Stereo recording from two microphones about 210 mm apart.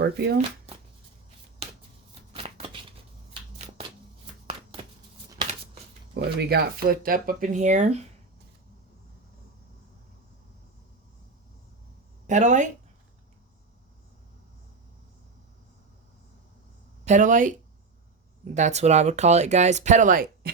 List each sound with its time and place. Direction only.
0.0 s speech: 50° right (ahead or behind)
2.3 s shuffling cards: 25° right (ahead or behind)
6.1 s speech: 50° right (ahead or behind); by 8.0 s 30° right (ahead or behind)
12.3 s speech: 35° right (ahead or behind)
17.1 s speech: 35° right (ahead or behind)